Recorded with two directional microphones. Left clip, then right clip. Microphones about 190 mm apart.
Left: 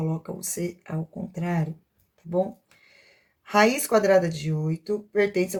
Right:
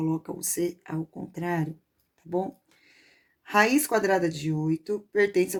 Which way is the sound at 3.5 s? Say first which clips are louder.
Left 2 dB; 40° right (ahead or behind).